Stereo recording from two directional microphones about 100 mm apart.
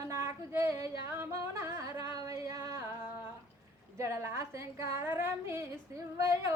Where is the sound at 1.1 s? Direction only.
25° right (ahead or behind).